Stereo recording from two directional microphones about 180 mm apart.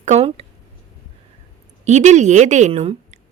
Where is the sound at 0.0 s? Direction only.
35° right (ahead or behind).